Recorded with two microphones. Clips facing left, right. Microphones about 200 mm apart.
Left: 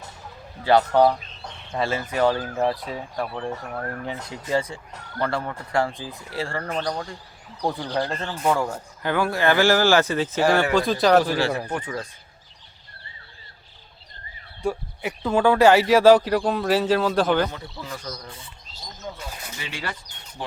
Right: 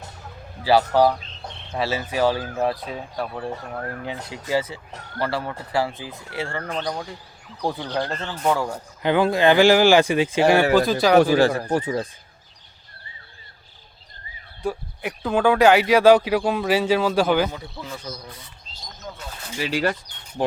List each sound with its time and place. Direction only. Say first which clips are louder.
0.6 s speech: even; 5° right (ahead or behind)
4.5 s speech: right 1 dB; 5° right (ahead or behind)
6.8 s speech: even; 10° right (ahead or behind)
8.6 s speech: even; 10° right (ahead or behind)
9.0 s speech: right 4 dB; 20° right (ahead or behind); by 11.2 s centre (ahead or behind)
11.2 s speech: right 6 dB; 45° right (ahead or behind)
14.6 s speech: left 1 dB; 5° right (ahead or behind)
19.2 s a sound: left 1 dB; 10° left (ahead or behind)
19.7 s speech: right 11 dB; 45° right (ahead or behind)